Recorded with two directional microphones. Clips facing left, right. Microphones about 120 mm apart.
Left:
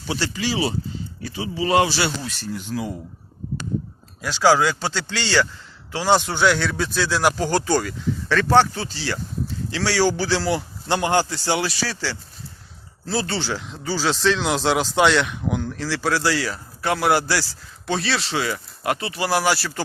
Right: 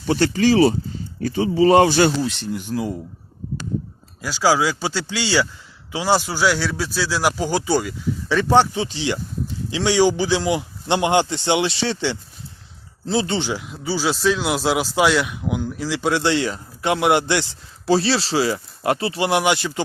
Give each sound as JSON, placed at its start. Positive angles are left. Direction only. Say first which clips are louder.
{"t": 0.1, "sound": "speech", "louder": "right 9 dB", "side_deg": -50}
{"t": 1.9, "sound": "speech", "louder": "right 8 dB", "side_deg": -45}
{"t": 2.2, "sound": "speech", "louder": "right 7 dB", "side_deg": -25}
{"t": 2.5, "sound": "a man's voice", "louder": "right 3 dB", "side_deg": -10}
{"t": 4.2, "sound": "a man's voice", "louder": "left 1 dB", "side_deg": -5}